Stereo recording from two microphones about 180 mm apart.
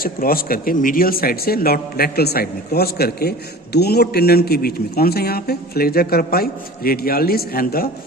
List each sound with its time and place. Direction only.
0.0 s speech: 55° left (ahead or behind)